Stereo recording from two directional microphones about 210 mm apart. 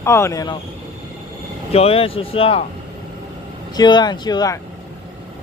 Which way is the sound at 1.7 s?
25° left (ahead or behind).